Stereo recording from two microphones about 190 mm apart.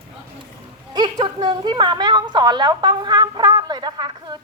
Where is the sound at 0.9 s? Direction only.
25° right (ahead or behind).